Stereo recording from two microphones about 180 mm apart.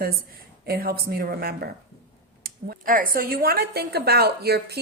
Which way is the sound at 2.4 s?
50° right (ahead or behind).